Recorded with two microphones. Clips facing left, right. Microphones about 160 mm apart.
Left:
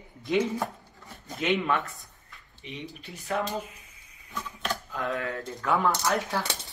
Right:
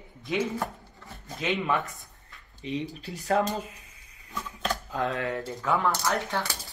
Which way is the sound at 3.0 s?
40° right (ahead or behind).